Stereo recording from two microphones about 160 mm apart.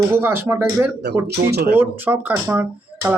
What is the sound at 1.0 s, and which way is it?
Speech, 90° right.